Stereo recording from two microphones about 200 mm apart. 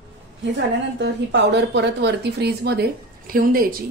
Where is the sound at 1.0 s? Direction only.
60° right (ahead or behind).